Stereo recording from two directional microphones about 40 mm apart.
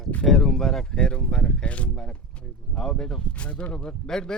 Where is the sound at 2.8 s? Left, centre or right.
Centre.